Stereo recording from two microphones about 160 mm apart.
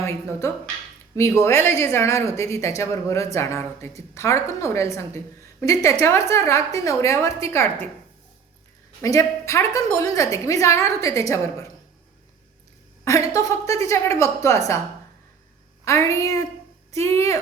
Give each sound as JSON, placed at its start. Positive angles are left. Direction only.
{"t": 0.0, "sound": "a woman's voice", "side_deg": 15}
{"t": 9.0, "sound": "a woman's voice", "side_deg": 20}
{"t": 13.1, "sound": "a woman's voice", "side_deg": 20}
{"t": 15.8, "sound": "a woman's voice", "side_deg": 20}